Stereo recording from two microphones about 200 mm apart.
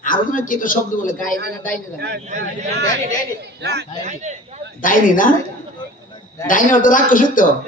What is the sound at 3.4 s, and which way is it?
Speech, 60° right (ahead or behind).